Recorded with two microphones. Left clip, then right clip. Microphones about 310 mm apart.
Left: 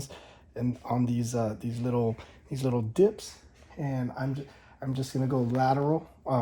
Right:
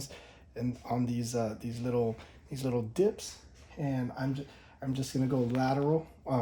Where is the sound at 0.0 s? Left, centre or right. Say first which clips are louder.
Left 2 dB; centre.